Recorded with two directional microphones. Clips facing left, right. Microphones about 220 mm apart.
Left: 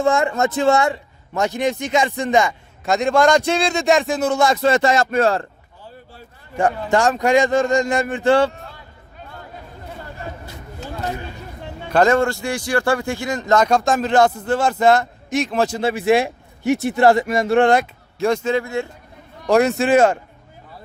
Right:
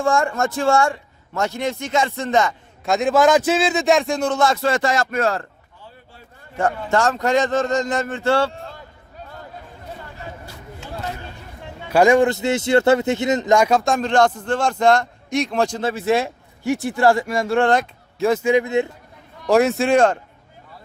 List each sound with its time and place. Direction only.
0.0 s a man's voice: 20° left (ahead or behind)
2.8 s a man's voice: centre (ahead or behind); by 6.2 s 35° left (ahead or behind)
6.6 s a man's voice: 15° left (ahead or behind)
11.9 s speech: 10° right (ahead or behind); by 17.8 s 15° left (ahead or behind)
18.2 s speech: 5° right (ahead or behind)
19.5 s speech: centre (ahead or behind)